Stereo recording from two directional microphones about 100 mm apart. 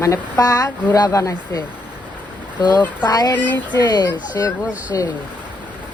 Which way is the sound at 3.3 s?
15° left (ahead or behind).